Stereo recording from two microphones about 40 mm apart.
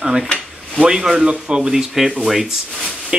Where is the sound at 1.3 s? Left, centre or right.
Right.